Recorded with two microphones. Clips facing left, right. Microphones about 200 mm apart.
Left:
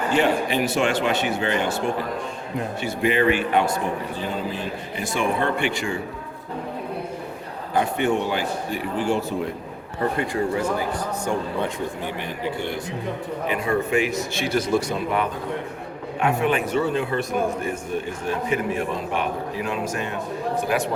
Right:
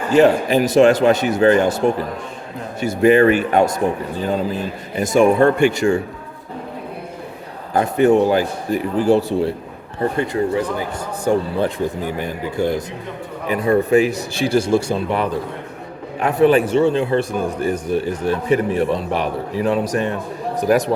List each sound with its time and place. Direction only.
0.1 s a man's voice: 40° right (ahead or behind)
7.7 s a man's voice: 40° right (ahead or behind)